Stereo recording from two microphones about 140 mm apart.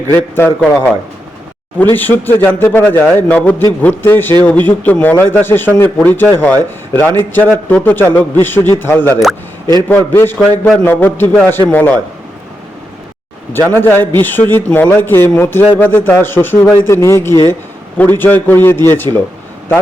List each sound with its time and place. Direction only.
0.1 s a man's voice: 15° left (ahead or behind)
13.5 s a man's voice: 15° left (ahead or behind)